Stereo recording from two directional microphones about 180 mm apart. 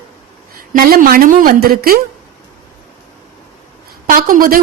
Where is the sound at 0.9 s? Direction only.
50° right (ahead or behind).